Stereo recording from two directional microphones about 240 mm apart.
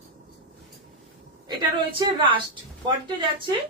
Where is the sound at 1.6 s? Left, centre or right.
Centre.